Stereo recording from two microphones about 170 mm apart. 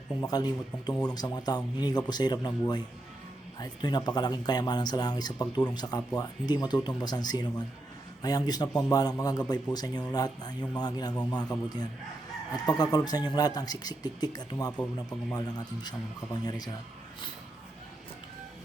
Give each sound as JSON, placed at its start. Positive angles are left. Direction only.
{"t": 0.2, "sound": "speech", "side_deg": 25}